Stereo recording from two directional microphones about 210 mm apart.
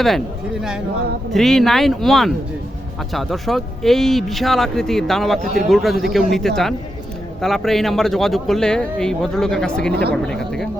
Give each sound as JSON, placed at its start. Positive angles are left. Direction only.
{"t": 1.3, "sound": "a man's voice", "side_deg": 0}
{"t": 9.9, "sound": "speech", "side_deg": -50}
{"t": 10.2, "sound": "a man's voice", "side_deg": 5}